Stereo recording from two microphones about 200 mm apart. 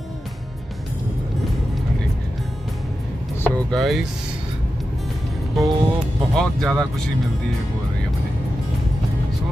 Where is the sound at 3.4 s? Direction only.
5° left (ahead or behind).